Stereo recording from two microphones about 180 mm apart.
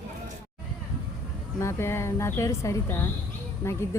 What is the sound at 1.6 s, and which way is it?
Speech, 15° left (ahead or behind).